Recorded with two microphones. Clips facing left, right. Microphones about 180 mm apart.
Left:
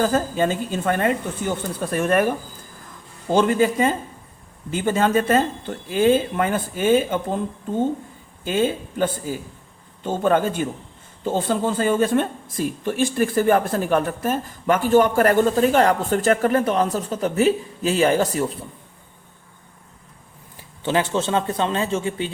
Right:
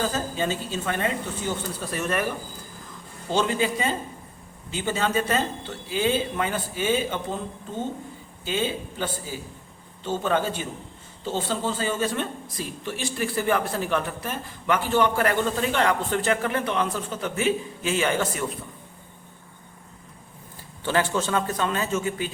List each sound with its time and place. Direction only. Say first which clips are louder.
0.0 s speech: left 7 dB; 55° left (ahead or behind)
8.4 s speech: left 6 dB; 50° left (ahead or behind)
20.8 s speech: left 3 dB; 20° left (ahead or behind)